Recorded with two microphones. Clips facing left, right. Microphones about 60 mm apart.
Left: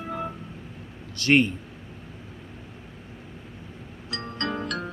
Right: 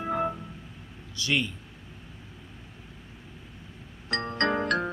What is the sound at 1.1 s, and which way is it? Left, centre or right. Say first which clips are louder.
Speech: left 8 dB; left.